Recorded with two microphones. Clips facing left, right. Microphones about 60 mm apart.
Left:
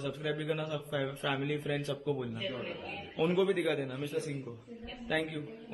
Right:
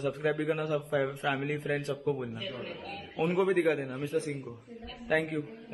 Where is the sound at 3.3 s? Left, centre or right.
Right.